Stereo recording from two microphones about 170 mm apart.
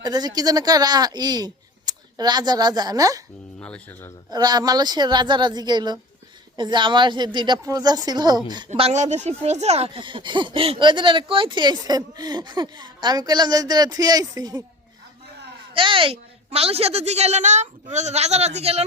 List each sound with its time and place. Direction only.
0.0 s speech: 25° right (ahead or behind)
3.6 s speech: 5° left (ahead or behind)
4.3 s speech: 25° right (ahead or behind)
15.7 s a woman's voice: 30° right (ahead or behind)